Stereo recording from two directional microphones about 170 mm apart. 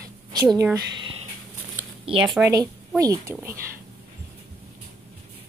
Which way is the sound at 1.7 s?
5° right (ahead or behind).